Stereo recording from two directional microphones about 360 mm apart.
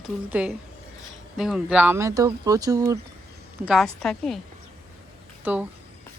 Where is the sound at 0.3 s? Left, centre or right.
Centre.